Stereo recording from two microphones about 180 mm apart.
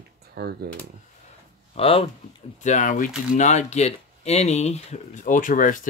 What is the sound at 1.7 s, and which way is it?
Speech, 30° left (ahead or behind).